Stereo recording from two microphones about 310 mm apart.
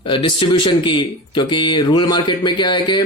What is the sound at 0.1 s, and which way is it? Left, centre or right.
A man's voice, centre.